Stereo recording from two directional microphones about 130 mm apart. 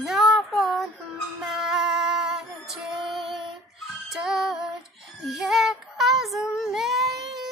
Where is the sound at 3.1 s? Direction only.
Centre (ahead or behind).